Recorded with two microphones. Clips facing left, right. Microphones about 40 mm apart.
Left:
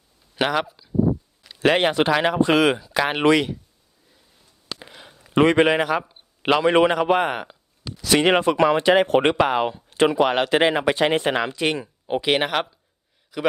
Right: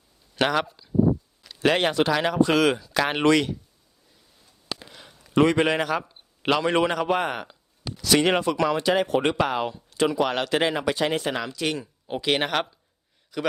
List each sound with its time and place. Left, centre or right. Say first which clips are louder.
0.3 s a man's voice: left 1 dB; centre
1.5 s speech: left 3 dB; centre
4.8 s a man's voice: left 3 dB; centre
7.9 s a sound: even; centre
8.1 s speech: left 3 dB; left
9.3 s speech: left 5 dB; left; by 13.5 s centre